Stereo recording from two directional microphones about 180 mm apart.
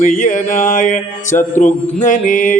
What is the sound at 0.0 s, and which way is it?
Mantra, 50° left (ahead or behind).